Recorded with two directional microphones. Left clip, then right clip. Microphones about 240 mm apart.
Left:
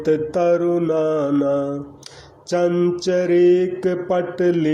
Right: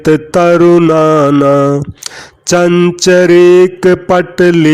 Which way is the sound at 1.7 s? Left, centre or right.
Right.